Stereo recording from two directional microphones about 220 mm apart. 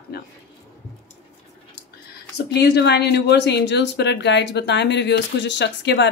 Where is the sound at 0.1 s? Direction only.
45° left (ahead or behind).